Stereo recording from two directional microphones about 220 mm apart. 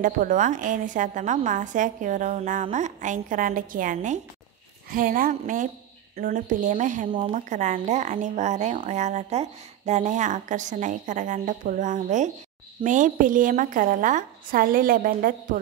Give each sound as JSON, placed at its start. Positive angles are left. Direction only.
{"t": 0.0, "sound": "speech", "side_deg": -35}
{"t": 7.1, "sound": "speech", "side_deg": -25}